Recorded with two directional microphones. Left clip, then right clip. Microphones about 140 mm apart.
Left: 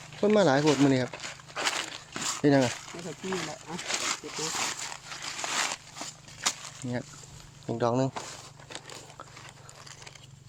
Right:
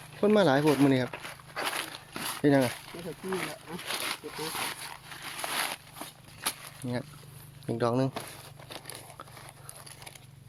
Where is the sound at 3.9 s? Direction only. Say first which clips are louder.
Left 2 dB; 30° left (ahead or behind).